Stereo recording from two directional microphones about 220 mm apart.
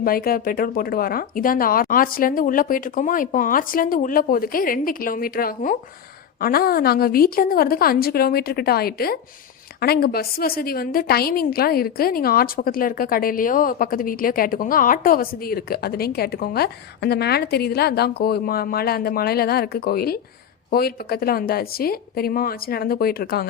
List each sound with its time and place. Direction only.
0.0 s a woman's voice: 40° left (ahead or behind)